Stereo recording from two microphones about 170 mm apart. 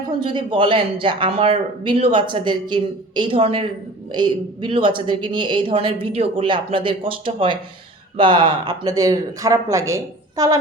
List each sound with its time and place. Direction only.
0.2 s speech: 30° right (ahead or behind)